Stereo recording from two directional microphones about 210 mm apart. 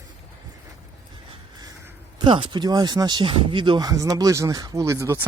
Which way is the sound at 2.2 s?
25° right (ahead or behind).